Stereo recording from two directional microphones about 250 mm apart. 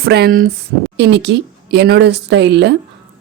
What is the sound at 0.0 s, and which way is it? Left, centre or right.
Speech, right.